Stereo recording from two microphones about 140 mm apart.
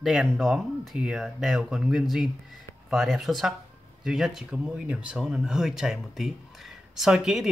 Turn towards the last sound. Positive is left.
turn(degrees=-5)  # may be behind; listen again after turning